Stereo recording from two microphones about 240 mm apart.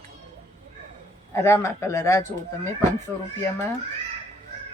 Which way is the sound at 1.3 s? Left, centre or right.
Centre.